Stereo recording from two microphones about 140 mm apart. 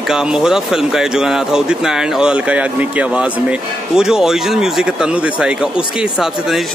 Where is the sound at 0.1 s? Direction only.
5° right (ahead or behind).